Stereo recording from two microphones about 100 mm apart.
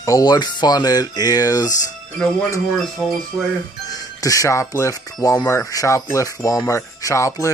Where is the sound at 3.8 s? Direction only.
35° left (ahead or behind).